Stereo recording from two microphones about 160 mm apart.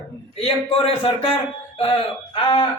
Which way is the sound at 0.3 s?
35° left (ahead or behind).